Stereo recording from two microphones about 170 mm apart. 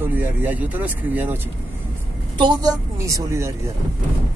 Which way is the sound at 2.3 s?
25° right (ahead or behind).